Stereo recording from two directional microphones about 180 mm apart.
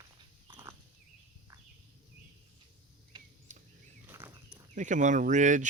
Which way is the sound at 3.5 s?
45° right (ahead or behind).